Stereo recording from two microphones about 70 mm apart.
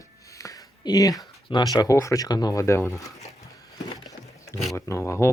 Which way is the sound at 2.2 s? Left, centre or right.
Left.